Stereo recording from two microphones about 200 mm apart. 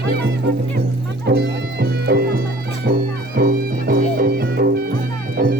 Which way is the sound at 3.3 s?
45° right (ahead or behind).